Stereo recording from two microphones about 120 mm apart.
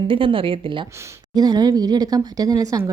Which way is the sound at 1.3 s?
35° right (ahead or behind).